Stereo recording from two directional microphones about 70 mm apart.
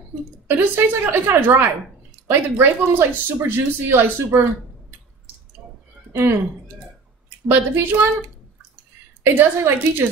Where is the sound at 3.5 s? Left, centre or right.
Right.